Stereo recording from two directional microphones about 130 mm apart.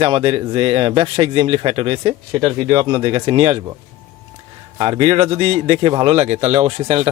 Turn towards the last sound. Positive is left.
turn(degrees=-55)  # may be behind; listen again after turning